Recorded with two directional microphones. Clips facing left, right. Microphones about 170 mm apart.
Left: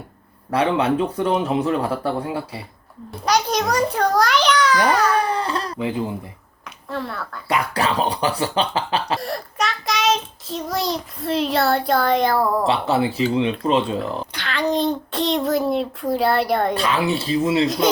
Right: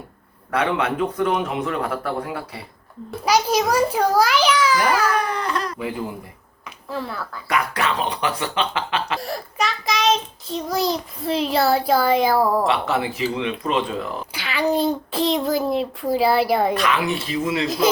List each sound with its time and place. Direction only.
0.5 s speech: 30° left (ahead or behind)
3.2 s child singing: 5° right (ahead or behind)
5.1 s speech: 30° left (ahead or behind)
6.9 s child singing: centre (ahead or behind)
7.4 s speech: 30° left (ahead or behind)
9.1 s child singing: centre (ahead or behind)
12.6 s speech: 30° left (ahead or behind)
14.3 s child singing: 5° right (ahead or behind)
16.7 s speech: 30° left (ahead or behind)